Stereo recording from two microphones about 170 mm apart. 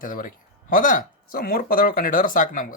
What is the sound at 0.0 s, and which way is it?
Speech, 55° left (ahead or behind).